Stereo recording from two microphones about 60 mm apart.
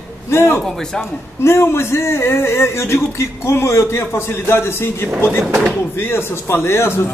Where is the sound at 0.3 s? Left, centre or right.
Left.